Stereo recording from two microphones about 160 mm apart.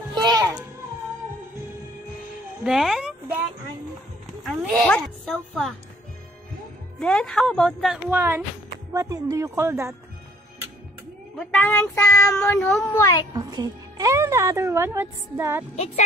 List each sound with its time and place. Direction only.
0.1 s children playing: 25° right (ahead or behind)
2.6 s a sound: 5° right (ahead or behind)
4.4 s a sound: 5° left (ahead or behind)
7.0 s speech: 5° left (ahead or behind)
8.1 s speech: 15° right (ahead or behind)
11.3 s a woman's voice: 5° left (ahead or behind)
12.1 s child singing: 20° left (ahead or behind)
12.4 s speech: 5° left (ahead or behind)
12.8 s a woman's voice: 20° left (ahead or behind)
13.3 s speech: 25° right (ahead or behind)